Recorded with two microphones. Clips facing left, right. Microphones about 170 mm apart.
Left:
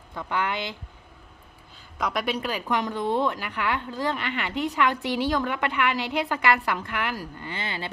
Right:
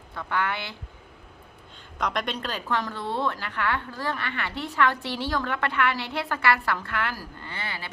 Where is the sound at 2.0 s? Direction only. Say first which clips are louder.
Left 2 dB; 5° left (ahead or behind).